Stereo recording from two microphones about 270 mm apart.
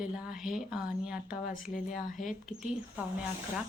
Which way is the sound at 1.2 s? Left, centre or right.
Left.